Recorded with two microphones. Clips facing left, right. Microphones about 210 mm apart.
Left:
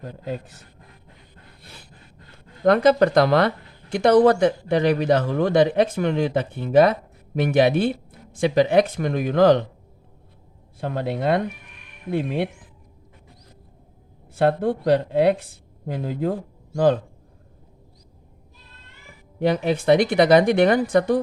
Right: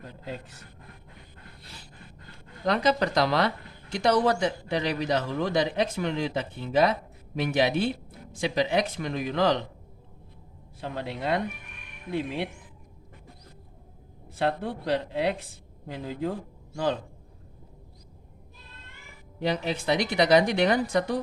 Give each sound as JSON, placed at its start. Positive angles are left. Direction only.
{"t": 2.6, "sound": "speech", "side_deg": 55}
{"t": 10.8, "sound": "speech", "side_deg": 55}
{"t": 14.3, "sound": "speech", "side_deg": 50}
{"t": 19.4, "sound": "speech", "side_deg": 55}